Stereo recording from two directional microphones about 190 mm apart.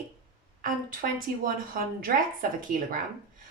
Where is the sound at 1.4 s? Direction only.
50° right (ahead or behind).